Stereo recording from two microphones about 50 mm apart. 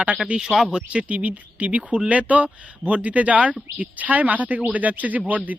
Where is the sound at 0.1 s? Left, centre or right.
Right.